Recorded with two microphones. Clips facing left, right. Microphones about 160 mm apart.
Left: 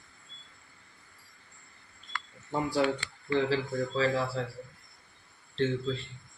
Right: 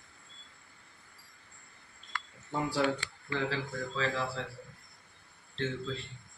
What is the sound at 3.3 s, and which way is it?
Speech, 30° left (ahead or behind).